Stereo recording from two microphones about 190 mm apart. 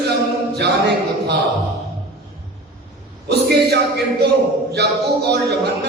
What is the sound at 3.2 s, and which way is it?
A man's voice, 60° right (ahead or behind).